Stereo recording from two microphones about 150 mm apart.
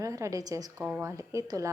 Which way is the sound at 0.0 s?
20° right (ahead or behind).